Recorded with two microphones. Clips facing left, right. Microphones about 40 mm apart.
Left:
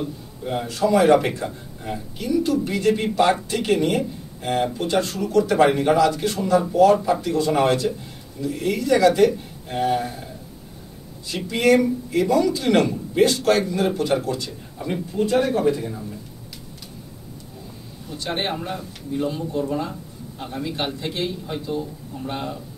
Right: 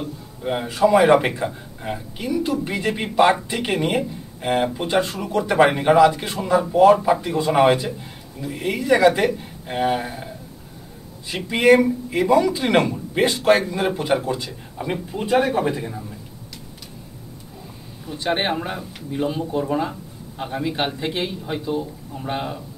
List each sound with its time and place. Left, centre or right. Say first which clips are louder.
0.4 s a man's voice: right 4 dB; right
18.1 s a man's voice: right 4 dB; right